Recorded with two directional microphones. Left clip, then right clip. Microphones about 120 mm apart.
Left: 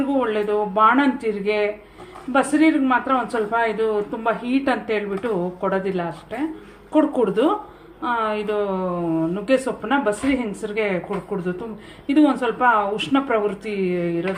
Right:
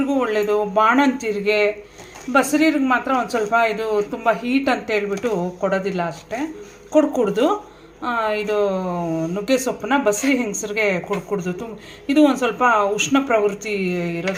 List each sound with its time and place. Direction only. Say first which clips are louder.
0.1 s speech: right 2 dB; 30° right (ahead or behind)
12.0 s speech: right 2 dB; 35° right (ahead or behind)